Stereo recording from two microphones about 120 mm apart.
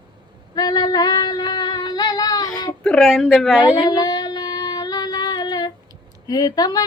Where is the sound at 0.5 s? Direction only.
35° left (ahead or behind).